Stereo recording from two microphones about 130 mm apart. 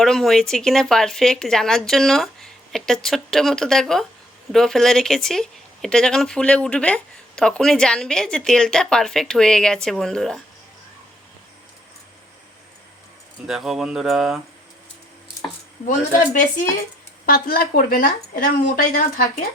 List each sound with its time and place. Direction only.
0.0 s speech: centre (ahead or behind)
13.5 s speech: centre (ahead or behind)
15.9 s speech: 80° left
17.7 s speech: 90° left